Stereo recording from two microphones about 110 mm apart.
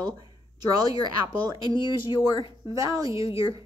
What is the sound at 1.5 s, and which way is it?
Speech, 50° left (ahead or behind).